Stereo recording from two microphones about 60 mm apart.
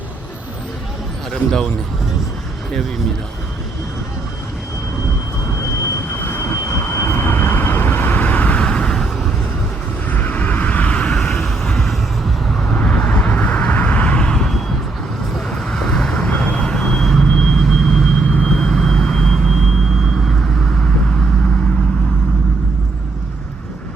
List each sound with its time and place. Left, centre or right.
1.3 s a man's voice: centre
6.1 s vehicle: left
8.6 s vehicle: centre
10.1 s vehicle: left
11.1 s vehicle: centre
12.6 s vehicle: centre
17.2 s a sound: centre
18.3 s vehicle: centre